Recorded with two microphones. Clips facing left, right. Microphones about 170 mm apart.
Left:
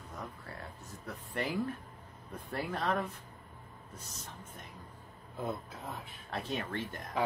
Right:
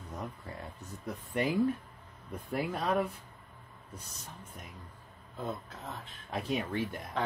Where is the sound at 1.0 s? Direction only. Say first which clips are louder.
Right 5 dB; 15° right (ahead or behind).